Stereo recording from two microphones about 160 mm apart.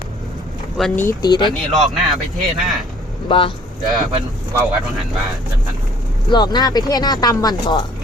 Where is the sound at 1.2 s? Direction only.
25° left (ahead or behind).